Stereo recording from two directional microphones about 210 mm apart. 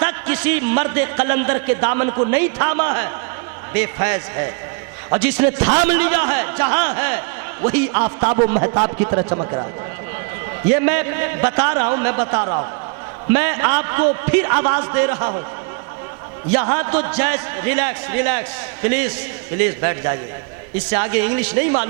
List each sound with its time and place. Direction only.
0.0 s a sound: 15° right (ahead or behind)
0.7 s a man's voice: 20° right (ahead or behind)
10.7 s a man's voice: 15° right (ahead or behind)
16.5 s a man's voice: 20° right (ahead or behind)